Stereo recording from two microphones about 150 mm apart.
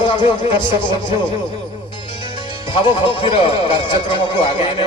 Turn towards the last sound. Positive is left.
turn(degrees=35)  # may be behind; listen again after turning